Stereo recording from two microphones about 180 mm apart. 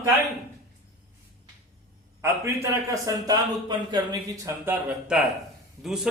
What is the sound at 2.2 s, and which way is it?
A man's voice, 15° right (ahead or behind).